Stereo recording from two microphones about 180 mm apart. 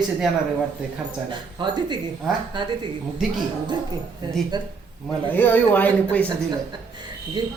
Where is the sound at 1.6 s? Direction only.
25° right (ahead or behind).